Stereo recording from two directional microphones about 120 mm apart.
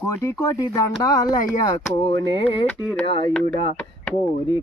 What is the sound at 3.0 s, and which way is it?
Speech, 45° left (ahead or behind).